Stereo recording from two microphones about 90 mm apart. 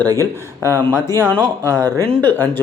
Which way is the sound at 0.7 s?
30° left (ahead or behind).